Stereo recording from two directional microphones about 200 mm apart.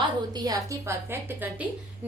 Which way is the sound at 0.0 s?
20° right (ahead or behind).